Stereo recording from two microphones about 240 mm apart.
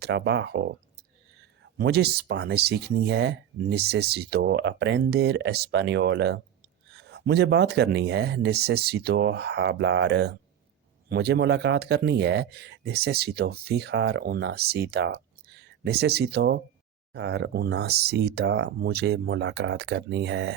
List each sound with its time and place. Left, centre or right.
0.0 s speech: right
1.8 s speech: right